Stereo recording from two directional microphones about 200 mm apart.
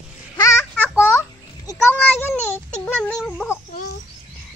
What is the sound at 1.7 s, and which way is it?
Speech, 10° left (ahead or behind).